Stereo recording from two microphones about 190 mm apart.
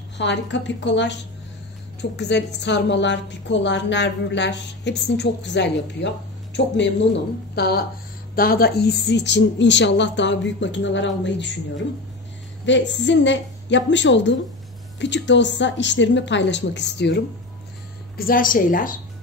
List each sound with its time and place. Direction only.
0.2 s a woman's voice: 70° left (ahead or behind)
7.5 s a woman's voice: 55° left (ahead or behind)
18.1 s a woman's voice: 50° left (ahead or behind)